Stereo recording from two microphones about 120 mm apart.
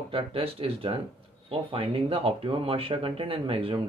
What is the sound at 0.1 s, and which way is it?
Speech, 50° right (ahead or behind).